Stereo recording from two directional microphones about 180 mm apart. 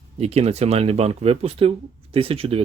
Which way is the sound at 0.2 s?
35° right (ahead or behind).